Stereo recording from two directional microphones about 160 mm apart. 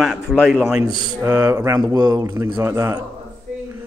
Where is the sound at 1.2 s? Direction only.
15° right (ahead or behind).